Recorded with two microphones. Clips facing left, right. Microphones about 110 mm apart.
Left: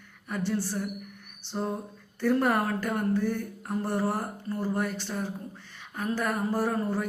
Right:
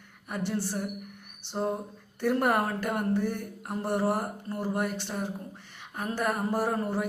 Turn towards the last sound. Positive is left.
turn(degrees=-20)  # may be behind; listen again after turning